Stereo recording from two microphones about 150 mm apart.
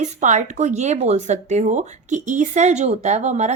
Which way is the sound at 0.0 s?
55° right (ahead or behind).